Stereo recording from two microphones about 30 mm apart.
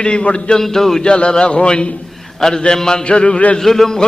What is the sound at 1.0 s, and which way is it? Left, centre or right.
Speech, left.